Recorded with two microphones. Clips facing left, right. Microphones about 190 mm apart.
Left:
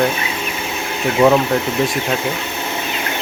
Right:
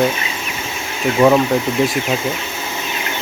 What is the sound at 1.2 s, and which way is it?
Speech, 10° left (ahead or behind).